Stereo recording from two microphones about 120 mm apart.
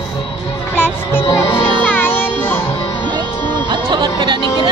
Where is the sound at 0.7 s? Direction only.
20° left (ahead or behind).